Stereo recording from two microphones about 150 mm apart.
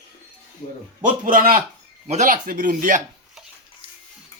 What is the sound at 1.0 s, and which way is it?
Speech, 60° right (ahead or behind).